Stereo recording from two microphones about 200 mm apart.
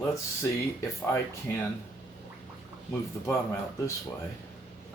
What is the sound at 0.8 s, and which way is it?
Speech, 15° left (ahead or behind).